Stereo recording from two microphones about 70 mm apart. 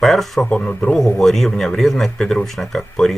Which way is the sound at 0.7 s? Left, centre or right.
Centre.